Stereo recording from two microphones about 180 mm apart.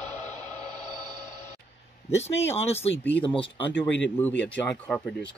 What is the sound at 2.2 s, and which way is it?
Speech, 35° left (ahead or behind).